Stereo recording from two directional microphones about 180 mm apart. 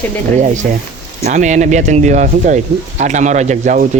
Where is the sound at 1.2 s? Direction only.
40° right (ahead or behind).